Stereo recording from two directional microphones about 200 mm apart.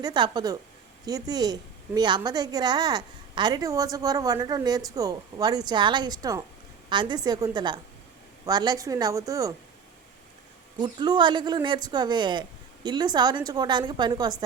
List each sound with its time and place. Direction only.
0.0 s a woman's voice: 20° right (ahead or behind)
10.8 s a woman's voice: 20° right (ahead or behind)